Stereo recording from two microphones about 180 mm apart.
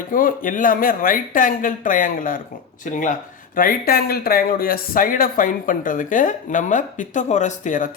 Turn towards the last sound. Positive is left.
turn(degrees=45)  # may be behind; listen again after turning